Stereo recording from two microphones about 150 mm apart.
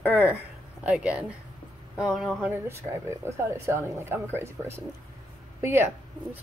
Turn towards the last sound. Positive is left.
turn(degrees=-15)  # may be behind; listen again after turning